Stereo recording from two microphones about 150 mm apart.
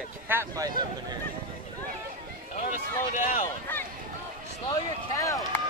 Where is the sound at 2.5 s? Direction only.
55° left (ahead or behind).